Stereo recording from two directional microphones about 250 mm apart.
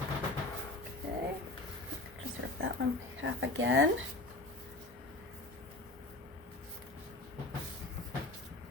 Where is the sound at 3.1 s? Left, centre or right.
Right.